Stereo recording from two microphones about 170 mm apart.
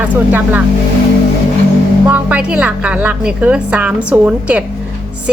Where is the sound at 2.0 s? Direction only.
10° right (ahead or behind).